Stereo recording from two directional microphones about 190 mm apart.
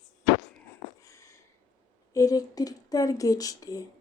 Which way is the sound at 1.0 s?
15° left (ahead or behind).